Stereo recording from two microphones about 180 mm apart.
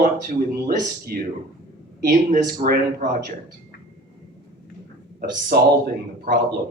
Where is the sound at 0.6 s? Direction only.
45° right (ahead or behind).